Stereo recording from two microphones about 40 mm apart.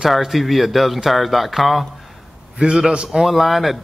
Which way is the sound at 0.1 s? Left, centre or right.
Centre.